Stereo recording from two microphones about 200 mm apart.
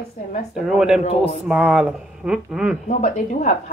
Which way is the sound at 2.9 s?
35° left (ahead or behind).